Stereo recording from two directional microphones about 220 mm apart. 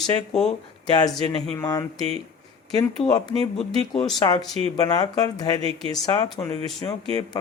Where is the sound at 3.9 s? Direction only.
Centre (ahead or behind).